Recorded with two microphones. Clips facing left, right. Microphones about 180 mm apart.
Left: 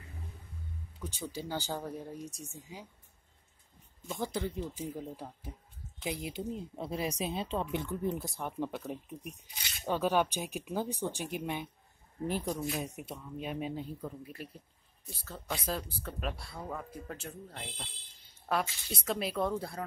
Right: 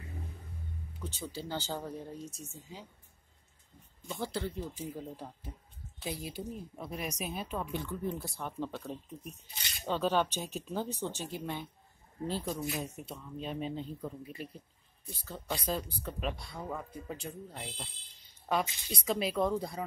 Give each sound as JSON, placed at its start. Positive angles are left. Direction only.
{"t": 1.3, "sound": "speech", "side_deg": 15}
{"t": 4.2, "sound": "speech", "side_deg": 15}
{"t": 12.4, "sound": "speech", "side_deg": 0}
{"t": 12.8, "sound": "speech", "side_deg": 10}
{"t": 18.9, "sound": "speech", "side_deg": 0}